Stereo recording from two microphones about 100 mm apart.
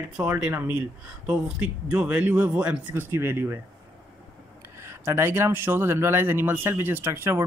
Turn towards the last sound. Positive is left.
turn(degrees=-25)  # may be behind; listen again after turning